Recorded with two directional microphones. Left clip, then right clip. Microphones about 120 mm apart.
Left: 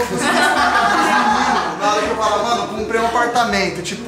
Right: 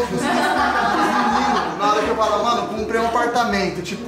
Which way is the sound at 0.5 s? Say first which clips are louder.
Left 3 dB; 20° right (ahead or behind).